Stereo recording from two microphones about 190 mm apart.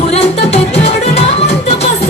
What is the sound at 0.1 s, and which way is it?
Music, 30° left (ahead or behind).